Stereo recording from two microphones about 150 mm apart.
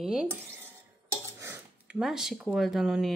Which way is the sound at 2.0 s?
5° right (ahead or behind).